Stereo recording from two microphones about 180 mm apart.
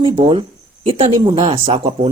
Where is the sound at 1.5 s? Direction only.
35° right (ahead or behind).